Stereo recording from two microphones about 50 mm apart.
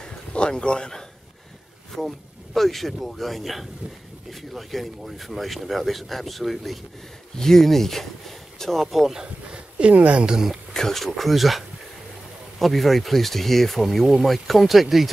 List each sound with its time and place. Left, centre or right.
0.0 s a sound: centre
2.0 s speech: centre
9.2 s speech: right
10.3 s speech: centre
10.7 s speech: centre